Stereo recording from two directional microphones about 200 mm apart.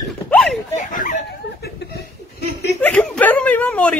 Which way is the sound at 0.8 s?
40° left (ahead or behind).